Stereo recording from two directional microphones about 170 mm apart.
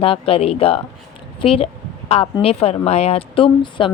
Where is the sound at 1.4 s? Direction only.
35° left (ahead or behind).